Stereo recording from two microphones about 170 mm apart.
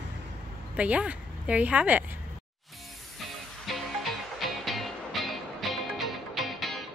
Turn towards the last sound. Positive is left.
turn(degrees=0)  # may be behind; listen again after turning